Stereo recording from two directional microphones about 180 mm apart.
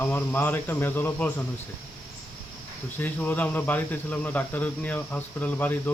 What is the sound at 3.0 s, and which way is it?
Speech, 10° left (ahead or behind).